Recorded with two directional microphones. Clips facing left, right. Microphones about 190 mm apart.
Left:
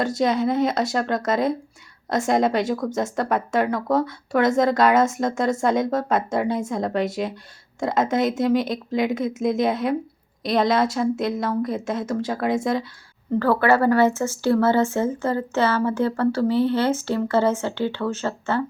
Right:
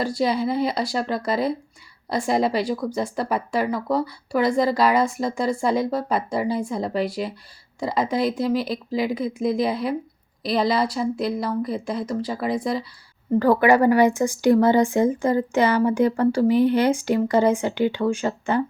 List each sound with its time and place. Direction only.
0.2 s a woman's voice: centre (ahead or behind)
13.4 s speech: 15° right (ahead or behind)